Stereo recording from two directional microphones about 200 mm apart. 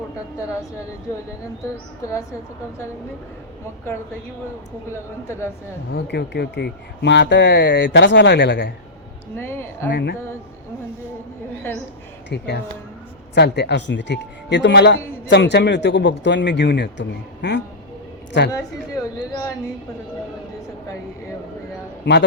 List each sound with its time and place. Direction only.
5.9 s speech: 60° left (ahead or behind)
9.4 s speech: 10° left (ahead or behind)
9.9 s speech: 60° left (ahead or behind)
12.3 s speech: 55° left (ahead or behind)
18.5 s speech: 15° left (ahead or behind)
22.0 s speech: 65° left (ahead or behind)